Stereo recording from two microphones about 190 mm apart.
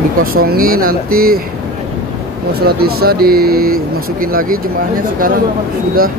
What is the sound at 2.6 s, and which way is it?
Speech, 55° right (ahead or behind).